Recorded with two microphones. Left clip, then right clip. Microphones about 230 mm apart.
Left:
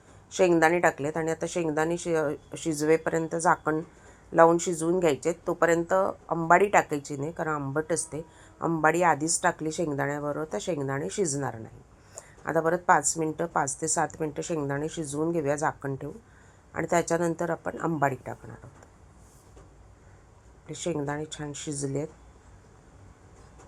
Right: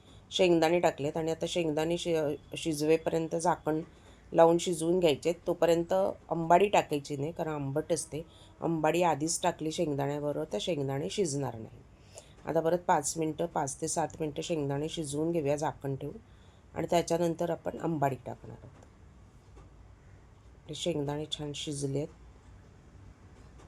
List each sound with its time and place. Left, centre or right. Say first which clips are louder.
0.3 s speech: left 4 dB; centre
7.1 s speech: left 2 dB; left
7.3 s a woman's voice: left 7 dB; centre
20.7 s speech: left 2 dB; centre